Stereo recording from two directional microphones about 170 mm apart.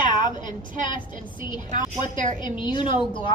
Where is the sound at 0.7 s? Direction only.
50° right (ahead or behind).